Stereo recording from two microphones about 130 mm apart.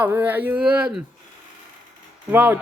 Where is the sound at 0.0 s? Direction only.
15° right (ahead or behind).